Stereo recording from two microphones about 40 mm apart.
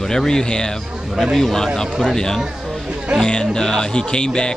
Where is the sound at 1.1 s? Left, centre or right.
Centre.